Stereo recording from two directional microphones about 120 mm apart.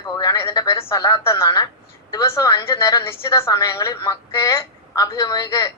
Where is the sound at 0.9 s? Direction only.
30° left (ahead or behind).